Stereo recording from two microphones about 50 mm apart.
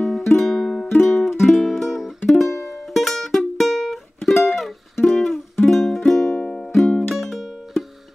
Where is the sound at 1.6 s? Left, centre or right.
Centre.